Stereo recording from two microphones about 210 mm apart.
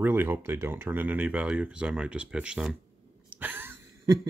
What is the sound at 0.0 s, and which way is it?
Speech, 10° right (ahead or behind).